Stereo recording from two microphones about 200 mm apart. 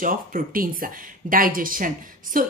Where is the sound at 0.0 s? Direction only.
45° right (ahead or behind).